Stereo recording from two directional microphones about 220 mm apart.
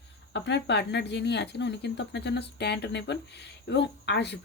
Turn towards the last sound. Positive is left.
turn(degrees=50)  # may be behind; listen again after turning